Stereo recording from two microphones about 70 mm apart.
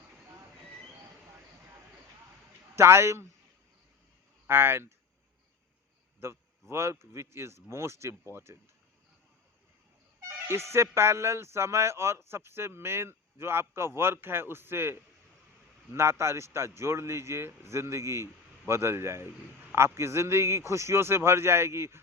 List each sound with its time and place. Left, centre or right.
2.7 s speech: right
4.4 s speech: right
6.1 s speech: right
10.2 s music: right
10.9 s speech: right